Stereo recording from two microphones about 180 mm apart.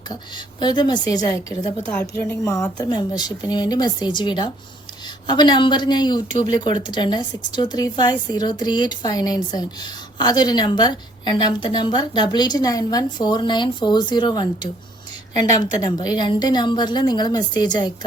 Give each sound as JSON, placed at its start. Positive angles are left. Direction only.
{"t": 0.6, "sound": "speech", "side_deg": 25}
{"t": 1.8, "sound": "speech", "side_deg": 10}